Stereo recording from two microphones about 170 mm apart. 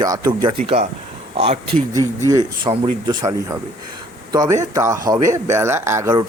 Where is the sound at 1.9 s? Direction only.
20° right (ahead or behind).